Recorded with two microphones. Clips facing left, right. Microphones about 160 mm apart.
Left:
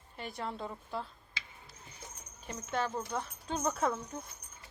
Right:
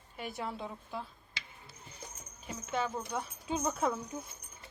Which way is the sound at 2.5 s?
5° right (ahead or behind).